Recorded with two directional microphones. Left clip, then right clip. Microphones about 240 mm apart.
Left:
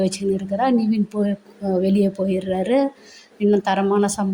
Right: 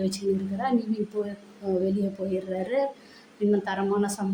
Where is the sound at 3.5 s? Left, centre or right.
Left.